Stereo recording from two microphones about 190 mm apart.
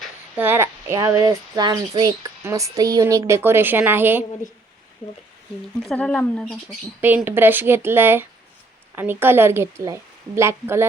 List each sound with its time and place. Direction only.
0.3 s speech: 10° right (ahead or behind)
5.8 s speech: 5° left (ahead or behind)
7.0 s speech: 10° right (ahead or behind)